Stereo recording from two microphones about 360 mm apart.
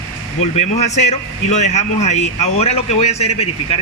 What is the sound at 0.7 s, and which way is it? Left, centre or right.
A man's voice, centre.